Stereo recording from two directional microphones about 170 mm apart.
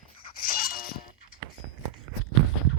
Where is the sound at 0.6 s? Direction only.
60° left (ahead or behind).